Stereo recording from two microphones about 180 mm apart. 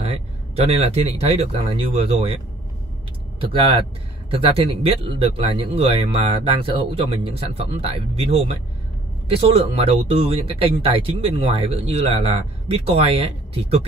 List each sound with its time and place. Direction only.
0.0 s speech: 35° right (ahead or behind)